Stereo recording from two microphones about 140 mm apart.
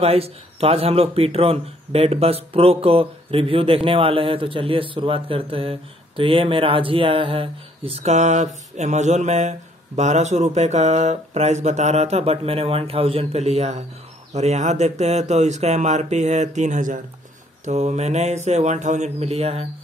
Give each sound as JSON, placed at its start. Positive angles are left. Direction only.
{"t": 0.0, "sound": "a man's voice", "side_deg": -45}